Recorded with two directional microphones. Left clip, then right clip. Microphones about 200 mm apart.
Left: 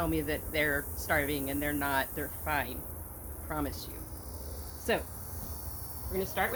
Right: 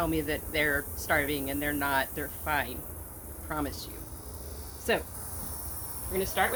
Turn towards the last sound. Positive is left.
turn(degrees=5)  # may be behind; listen again after turning